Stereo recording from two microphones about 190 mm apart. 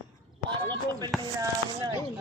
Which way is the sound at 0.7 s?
20° right (ahead or behind).